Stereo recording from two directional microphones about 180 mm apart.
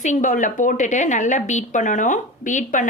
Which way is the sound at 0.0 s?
45° left (ahead or behind).